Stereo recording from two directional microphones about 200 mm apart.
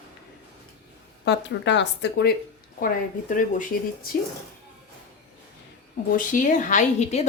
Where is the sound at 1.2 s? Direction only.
60° left (ahead or behind).